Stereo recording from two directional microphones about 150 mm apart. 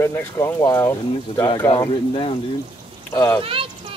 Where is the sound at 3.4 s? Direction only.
35° right (ahead or behind).